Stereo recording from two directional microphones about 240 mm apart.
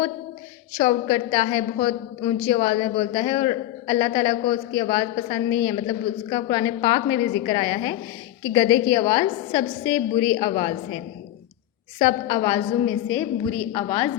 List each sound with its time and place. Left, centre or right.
0.8 s a woman's voice: centre
11.9 s a woman's voice: centre